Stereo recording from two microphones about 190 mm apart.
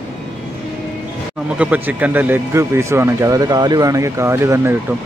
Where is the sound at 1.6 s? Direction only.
10° right (ahead or behind).